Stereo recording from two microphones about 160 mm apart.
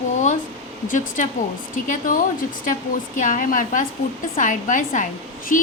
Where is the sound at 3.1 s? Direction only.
55° left (ahead or behind).